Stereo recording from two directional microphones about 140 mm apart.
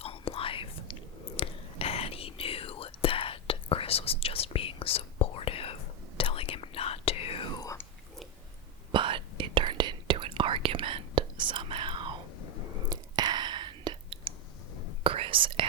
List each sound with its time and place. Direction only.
0.0 s whispering: 45° left (ahead or behind)
7.6 s whispering: 20° left (ahead or behind)
8.9 s whispering: 35° right (ahead or behind)